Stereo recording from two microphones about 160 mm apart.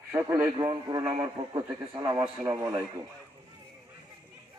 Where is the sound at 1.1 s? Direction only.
35° right (ahead or behind).